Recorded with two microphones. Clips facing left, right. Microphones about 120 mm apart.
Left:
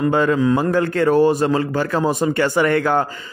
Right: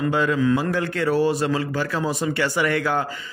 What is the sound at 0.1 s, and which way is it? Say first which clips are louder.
Speech: left 2 dB; 45° left (ahead or behind).